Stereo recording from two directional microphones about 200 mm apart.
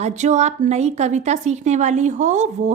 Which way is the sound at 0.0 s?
35° right (ahead or behind).